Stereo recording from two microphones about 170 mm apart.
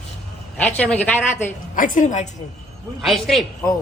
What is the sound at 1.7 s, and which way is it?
Speech, 50° left (ahead or behind).